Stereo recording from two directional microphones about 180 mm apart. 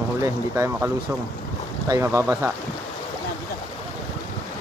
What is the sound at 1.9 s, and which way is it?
Speech, 15° right (ahead or behind).